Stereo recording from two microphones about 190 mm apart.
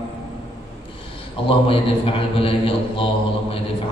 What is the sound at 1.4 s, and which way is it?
A man's voice, 30° left (ahead or behind).